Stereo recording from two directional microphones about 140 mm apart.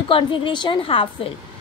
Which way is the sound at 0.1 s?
35° left (ahead or behind).